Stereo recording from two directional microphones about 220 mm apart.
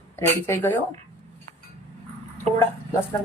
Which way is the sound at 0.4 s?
10° left (ahead or behind).